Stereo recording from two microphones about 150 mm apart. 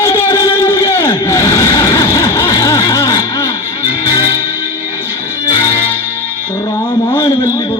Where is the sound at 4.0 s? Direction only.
20° left (ahead or behind).